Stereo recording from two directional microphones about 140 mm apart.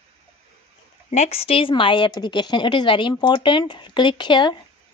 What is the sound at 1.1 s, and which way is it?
A woman's voice, 50° left (ahead or behind).